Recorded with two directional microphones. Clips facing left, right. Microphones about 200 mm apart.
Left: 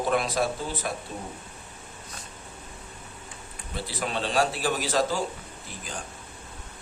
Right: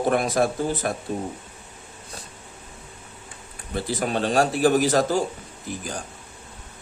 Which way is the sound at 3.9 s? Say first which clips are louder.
Right 6 dB; 45° right (ahead or behind).